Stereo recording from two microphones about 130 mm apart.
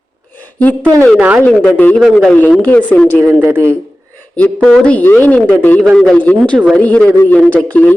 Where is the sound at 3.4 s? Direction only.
20° right (ahead or behind).